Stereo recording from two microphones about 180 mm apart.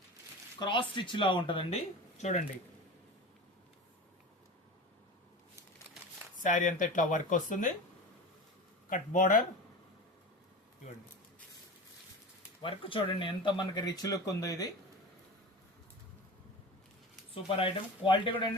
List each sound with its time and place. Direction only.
0.6 s speech: 25° left (ahead or behind)
2.1 s speech: 40° left (ahead or behind)
6.4 s speech: 45° left (ahead or behind)
8.9 s speech: 45° left (ahead or behind)
12.6 s speech: 30° left (ahead or behind)
17.3 s speech: 30° left (ahead or behind)